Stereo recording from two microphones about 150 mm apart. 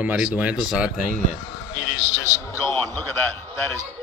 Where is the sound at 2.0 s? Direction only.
20° left (ahead or behind).